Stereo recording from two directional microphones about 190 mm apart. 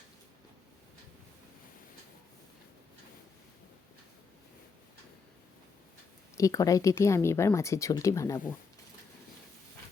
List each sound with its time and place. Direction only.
6.3 s speech: 15° left (ahead or behind)